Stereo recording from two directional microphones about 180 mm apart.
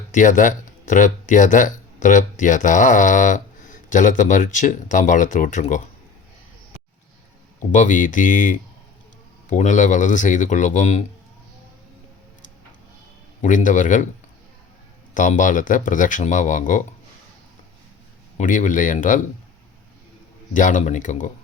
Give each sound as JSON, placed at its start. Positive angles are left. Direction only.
{"t": 0.1, "sound": "speech", "side_deg": 45}
{"t": 7.6, "sound": "speech", "side_deg": 45}
{"t": 13.4, "sound": "speech", "side_deg": 45}
{"t": 15.1, "sound": "speech", "side_deg": 45}
{"t": 18.3, "sound": "speech", "side_deg": 45}
{"t": 20.5, "sound": "speech", "side_deg": 45}